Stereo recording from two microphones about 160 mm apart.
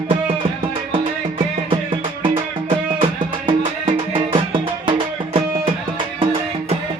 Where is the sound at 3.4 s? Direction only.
35° right (ahead or behind).